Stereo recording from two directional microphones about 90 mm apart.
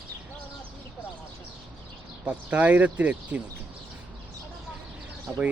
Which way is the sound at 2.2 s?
15° right (ahead or behind).